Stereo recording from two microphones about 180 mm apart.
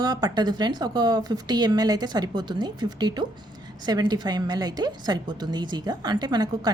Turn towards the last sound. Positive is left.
turn(degrees=-20)  # may be behind; listen again after turning